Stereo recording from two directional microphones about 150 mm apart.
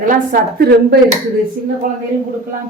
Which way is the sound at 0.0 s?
65° right (ahead or behind).